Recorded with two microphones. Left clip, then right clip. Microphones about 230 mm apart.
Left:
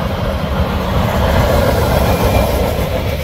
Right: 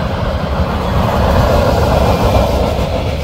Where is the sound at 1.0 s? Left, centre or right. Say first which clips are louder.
Right 2 dB; centre; by 2.5 s left.